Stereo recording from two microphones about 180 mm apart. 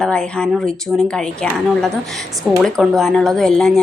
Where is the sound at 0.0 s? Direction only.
5° left (ahead or behind).